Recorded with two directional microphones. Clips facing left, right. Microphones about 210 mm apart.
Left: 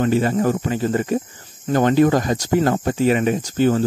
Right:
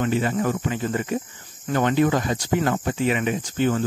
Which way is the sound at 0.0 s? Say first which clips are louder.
Left 5 dB; 40° left (ahead or behind).